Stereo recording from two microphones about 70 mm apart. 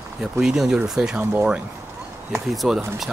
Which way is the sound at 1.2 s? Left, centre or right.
Centre.